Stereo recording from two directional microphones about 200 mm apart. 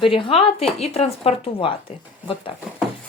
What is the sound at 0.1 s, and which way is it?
Speech, 30° left (ahead or behind).